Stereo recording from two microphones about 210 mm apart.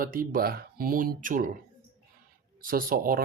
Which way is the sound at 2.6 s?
45° right (ahead or behind).